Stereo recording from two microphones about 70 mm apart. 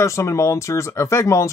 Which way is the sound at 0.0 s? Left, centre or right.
Left.